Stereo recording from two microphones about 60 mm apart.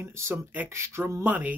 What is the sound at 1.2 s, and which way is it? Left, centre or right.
Speech, right.